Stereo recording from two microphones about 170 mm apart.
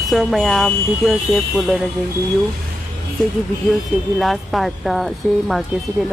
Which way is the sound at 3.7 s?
Centre (ahead or behind).